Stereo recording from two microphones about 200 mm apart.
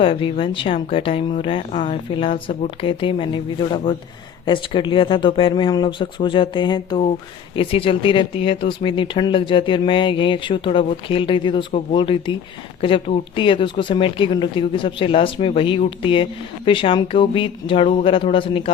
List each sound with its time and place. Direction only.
0.0 s speech: 25° left (ahead or behind)